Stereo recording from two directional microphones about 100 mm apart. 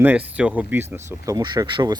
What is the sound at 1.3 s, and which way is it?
Speech, 45° right (ahead or behind).